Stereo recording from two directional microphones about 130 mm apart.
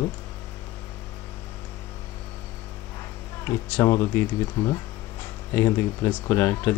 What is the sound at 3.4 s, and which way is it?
Speech, 20° left (ahead or behind).